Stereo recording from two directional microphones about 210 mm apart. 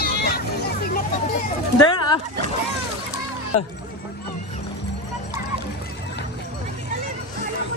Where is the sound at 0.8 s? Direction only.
45° left (ahead or behind).